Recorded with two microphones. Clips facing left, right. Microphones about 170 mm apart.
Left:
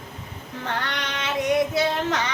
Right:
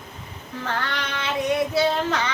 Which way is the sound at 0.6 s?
20° left (ahead or behind).